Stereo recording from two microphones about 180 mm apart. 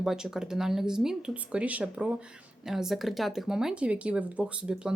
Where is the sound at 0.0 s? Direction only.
Centre (ahead or behind).